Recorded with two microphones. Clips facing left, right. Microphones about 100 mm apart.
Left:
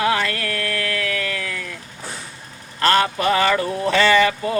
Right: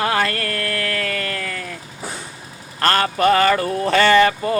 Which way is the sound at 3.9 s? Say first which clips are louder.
Right 2 dB; 45° right (ahead or behind).